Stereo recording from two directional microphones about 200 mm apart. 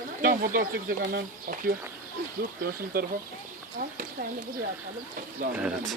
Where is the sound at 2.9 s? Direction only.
45° right (ahead or behind).